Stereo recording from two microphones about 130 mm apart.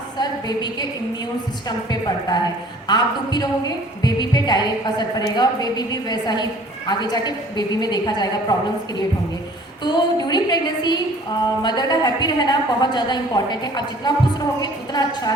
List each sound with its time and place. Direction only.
0.2 s a sound: 35° left (ahead or behind)
1.6 s a woman's voice: 30° left (ahead or behind)
9.8 s a woman's voice: 35° left (ahead or behind)